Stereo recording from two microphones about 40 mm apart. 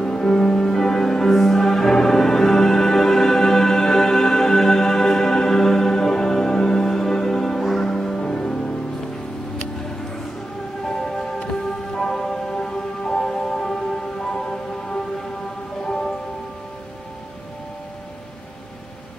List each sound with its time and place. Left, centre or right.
0.0 s music: centre
10.9 s music: centre